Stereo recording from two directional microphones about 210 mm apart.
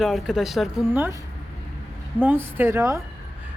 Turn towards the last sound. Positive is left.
turn(degrees=-15)  # may be behind; listen again after turning